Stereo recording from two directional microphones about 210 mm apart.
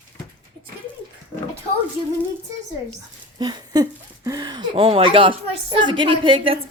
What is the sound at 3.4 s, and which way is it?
Speech, 20° right (ahead or behind).